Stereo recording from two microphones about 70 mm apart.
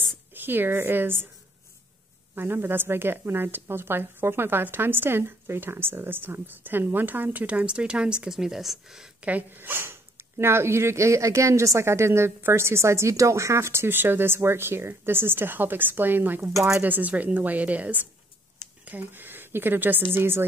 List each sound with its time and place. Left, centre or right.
0.3 s a woman's voice: right
2.3 s speech: right; by 9.1 s centre
9.2 s a woman's voice: right